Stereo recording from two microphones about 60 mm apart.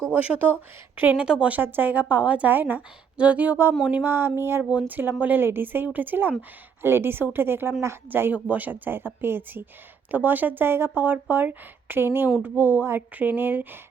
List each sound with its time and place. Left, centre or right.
0.3 s a woman's voice: right
8.1 s speech: right